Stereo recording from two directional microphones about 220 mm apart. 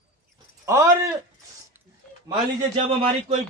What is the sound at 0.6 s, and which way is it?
Speech, 15° right (ahead or behind).